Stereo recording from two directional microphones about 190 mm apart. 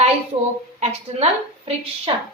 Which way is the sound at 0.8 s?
30° right (ahead or behind).